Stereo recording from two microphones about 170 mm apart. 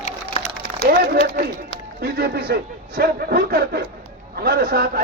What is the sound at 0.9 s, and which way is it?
Speech, 65° right (ahead or behind).